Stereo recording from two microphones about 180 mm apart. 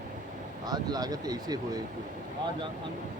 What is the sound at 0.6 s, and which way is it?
Speech, 20° right (ahead or behind).